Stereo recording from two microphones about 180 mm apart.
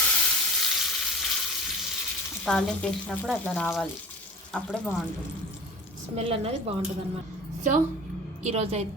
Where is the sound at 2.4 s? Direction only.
5° left (ahead or behind).